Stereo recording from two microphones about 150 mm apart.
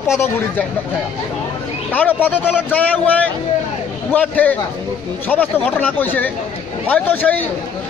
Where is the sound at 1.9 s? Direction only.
10° left (ahead or behind).